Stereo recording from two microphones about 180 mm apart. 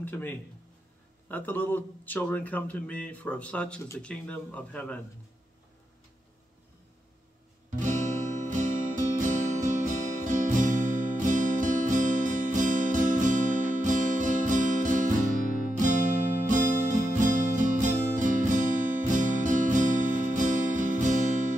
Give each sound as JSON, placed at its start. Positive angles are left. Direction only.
{"t": 0.0, "sound": "speech", "side_deg": 10}
{"t": 7.7, "sound": "music", "side_deg": -45}